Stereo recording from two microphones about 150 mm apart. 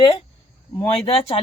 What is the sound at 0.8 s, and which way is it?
Speech, 35° left (ahead or behind).